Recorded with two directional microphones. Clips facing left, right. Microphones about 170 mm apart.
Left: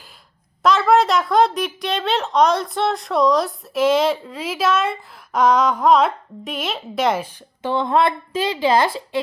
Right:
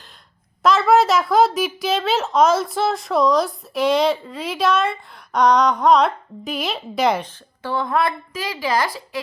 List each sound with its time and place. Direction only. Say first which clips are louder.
0.6 s a woman's voice: even; centre (ahead or behind)
7.6 s speech: left 3 dB; 20° left (ahead or behind)